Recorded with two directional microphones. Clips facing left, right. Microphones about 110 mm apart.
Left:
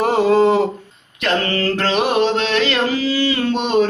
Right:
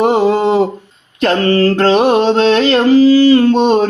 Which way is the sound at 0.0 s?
25° right (ahead or behind).